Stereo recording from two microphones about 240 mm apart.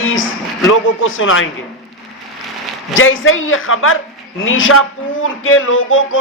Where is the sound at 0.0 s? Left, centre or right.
Left.